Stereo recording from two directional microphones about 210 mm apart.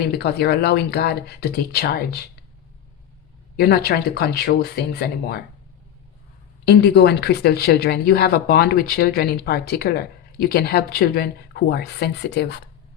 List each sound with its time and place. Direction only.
0.1 s speech: 50° left (ahead or behind)
3.6 s speech: 50° left (ahead or behind)
6.7 s speech: 50° left (ahead or behind)